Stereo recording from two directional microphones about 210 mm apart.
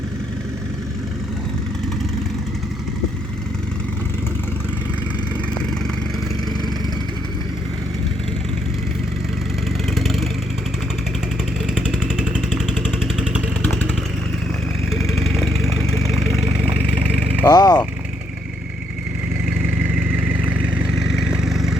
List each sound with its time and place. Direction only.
9.9 s vehicle: centre (ahead or behind)
11.6 s vehicle: 5° right (ahead or behind)
13.6 s vehicle: 10° left (ahead or behind)
14.9 s vehicle: centre (ahead or behind)
17.2 s vehicle: 15° left (ahead or behind)
21.2 s a sound: centre (ahead or behind)